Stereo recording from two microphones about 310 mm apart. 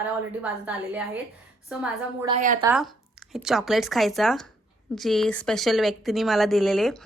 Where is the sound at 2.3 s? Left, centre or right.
Right.